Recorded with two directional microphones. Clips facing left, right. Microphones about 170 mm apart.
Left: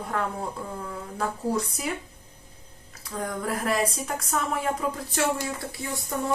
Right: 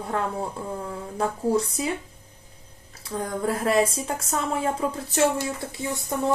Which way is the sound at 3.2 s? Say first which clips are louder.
Right 3 dB; 30° right (ahead or behind).